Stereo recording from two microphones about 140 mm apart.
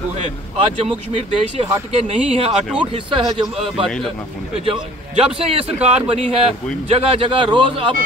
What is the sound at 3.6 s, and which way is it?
Speech, centre (ahead or behind).